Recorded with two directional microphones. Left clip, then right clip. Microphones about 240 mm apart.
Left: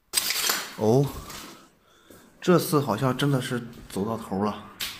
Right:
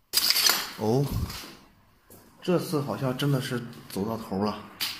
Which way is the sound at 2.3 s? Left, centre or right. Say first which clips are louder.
Left 5 dB; left.